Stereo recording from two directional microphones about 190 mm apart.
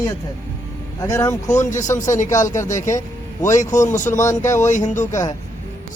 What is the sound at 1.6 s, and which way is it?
Speech, 40° left (ahead or behind).